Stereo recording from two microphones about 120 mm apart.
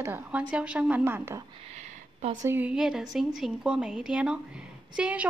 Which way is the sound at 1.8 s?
65° right (ahead or behind).